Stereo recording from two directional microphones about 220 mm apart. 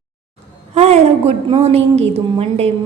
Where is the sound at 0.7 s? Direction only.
30° right (ahead or behind).